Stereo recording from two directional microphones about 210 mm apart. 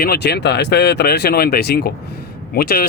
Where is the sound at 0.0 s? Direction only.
50° left (ahead or behind).